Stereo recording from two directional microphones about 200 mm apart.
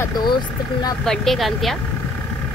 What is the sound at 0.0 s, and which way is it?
Vehicle, 20° left (ahead or behind).